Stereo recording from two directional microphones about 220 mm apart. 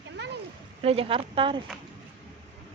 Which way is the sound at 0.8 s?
25° right (ahead or behind).